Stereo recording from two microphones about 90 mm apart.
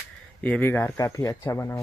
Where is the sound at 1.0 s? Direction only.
35° left (ahead or behind).